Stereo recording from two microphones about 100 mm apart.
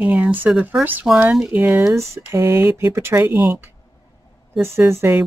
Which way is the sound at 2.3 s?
30° right (ahead or behind).